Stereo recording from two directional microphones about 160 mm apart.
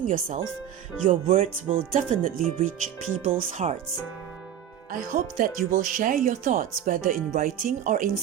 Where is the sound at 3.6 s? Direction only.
45° right (ahead or behind).